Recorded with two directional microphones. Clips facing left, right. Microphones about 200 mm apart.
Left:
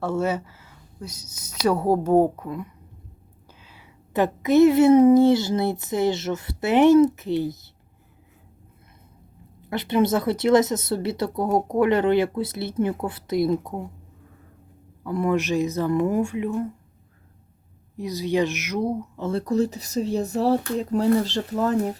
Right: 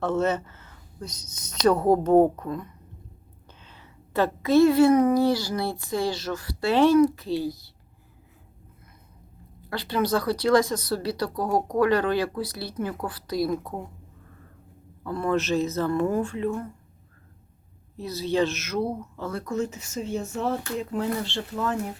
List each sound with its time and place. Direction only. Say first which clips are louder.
0.0 s speech: even; 10° left (ahead or behind)
9.6 s speech: left 5 dB; 20° left (ahead or behind)
15.0 s speech: left 2 dB; 15° left (ahead or behind)
17.9 s speech: left 2 dB; 15° left (ahead or behind); by 21.8 s 40° left (ahead or behind)